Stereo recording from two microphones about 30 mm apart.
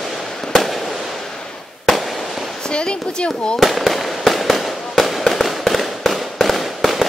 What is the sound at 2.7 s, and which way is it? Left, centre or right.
Speech, left.